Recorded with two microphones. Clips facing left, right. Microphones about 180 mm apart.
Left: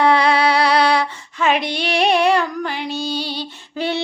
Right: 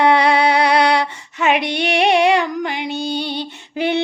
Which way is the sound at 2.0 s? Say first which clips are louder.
Right 1 dB; 65° right (ahead or behind).